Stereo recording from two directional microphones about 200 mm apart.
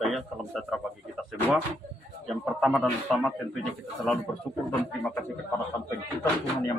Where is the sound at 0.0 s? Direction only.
Centre (ahead or behind).